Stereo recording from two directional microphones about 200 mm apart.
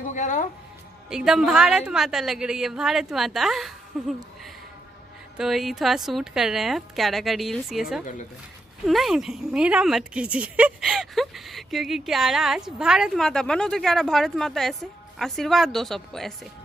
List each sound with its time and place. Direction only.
0.1 s speech: 40° left (ahead or behind)
1.1 s speech: 5° right (ahead or behind)
5.4 s speech: centre (ahead or behind)